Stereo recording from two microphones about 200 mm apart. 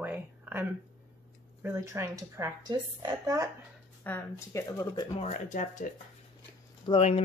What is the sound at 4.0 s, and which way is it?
Speech, 10° left (ahead or behind).